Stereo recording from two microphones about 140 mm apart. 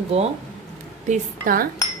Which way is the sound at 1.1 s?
85° right.